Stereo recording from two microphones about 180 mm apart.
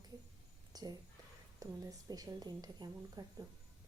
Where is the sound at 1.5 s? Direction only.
20° right (ahead or behind).